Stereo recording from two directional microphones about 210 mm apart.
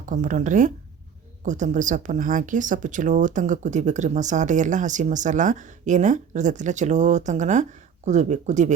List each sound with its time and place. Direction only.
0.0 s speech: 40° right (ahead or behind)